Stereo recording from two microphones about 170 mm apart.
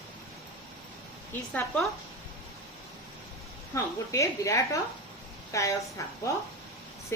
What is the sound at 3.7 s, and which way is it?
A woman's voice, 20° left (ahead or behind).